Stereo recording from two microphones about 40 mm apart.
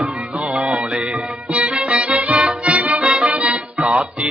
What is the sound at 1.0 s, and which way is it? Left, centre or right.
Music, right.